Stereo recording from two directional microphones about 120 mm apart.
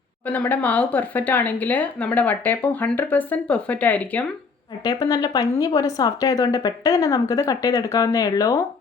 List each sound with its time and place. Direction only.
0.3 s speech: 15° left (ahead or behind)
4.8 s speech: 35° left (ahead or behind)